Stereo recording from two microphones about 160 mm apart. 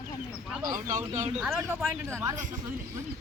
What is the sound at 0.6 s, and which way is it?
Speech, 55° right (ahead or behind).